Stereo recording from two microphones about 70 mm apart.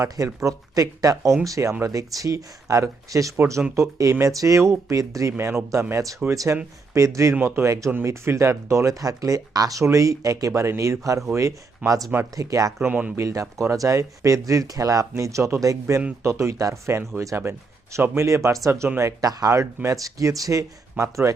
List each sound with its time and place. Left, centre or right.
0.4 s speech: right
3.3 s speech: right
3.8 s speech: right
7.3 s speech: right
11.8 s speech: right
12.4 s speech: right
12.8 s speech: right
13.1 s speech: right
17.2 s speech: right
19.2 s speech: right